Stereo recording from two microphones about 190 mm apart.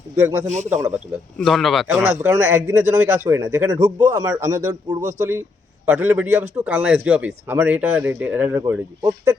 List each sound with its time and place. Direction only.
0.2 s speech: 15° right (ahead or behind)
0.4 s speech: 40° right (ahead or behind)
0.7 s speech: 15° right (ahead or behind)
1.4 s speech: centre (ahead or behind); by 4.4 s 15° right (ahead or behind)
4.9 s speech: 40° right (ahead or behind)
5.8 s speech: 10° right (ahead or behind)